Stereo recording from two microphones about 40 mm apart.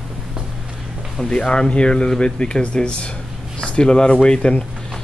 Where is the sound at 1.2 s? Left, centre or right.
Centre.